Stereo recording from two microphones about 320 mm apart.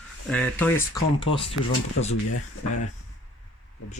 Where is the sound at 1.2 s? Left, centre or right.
Centre.